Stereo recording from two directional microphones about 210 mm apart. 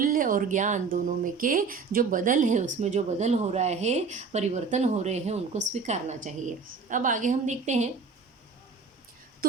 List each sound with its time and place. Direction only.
0.0 s a woman's voice: 40° right (ahead or behind)